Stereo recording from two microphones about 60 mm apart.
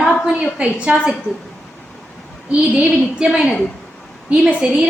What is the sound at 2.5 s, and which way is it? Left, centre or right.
A woman's voice, centre.